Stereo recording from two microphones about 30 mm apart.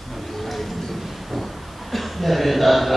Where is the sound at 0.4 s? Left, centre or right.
Centre.